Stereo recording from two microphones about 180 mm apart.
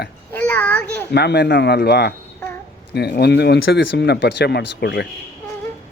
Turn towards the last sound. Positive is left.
turn(degrees=70)  # may be behind; listen again after turning